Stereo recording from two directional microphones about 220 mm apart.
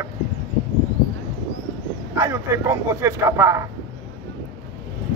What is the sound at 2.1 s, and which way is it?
Speech, 15° right (ahead or behind).